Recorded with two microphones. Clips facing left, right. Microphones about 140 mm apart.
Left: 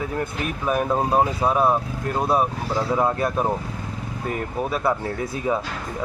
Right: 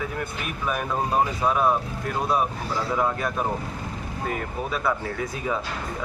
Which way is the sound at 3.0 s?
30° left (ahead or behind).